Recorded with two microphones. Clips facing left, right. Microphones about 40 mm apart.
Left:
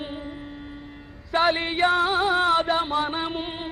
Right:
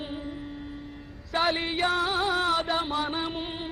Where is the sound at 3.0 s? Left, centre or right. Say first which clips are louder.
Left 3 dB; centre.